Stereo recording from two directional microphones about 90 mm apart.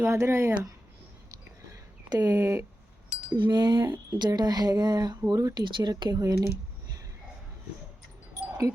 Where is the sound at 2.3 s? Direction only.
25° right (ahead or behind).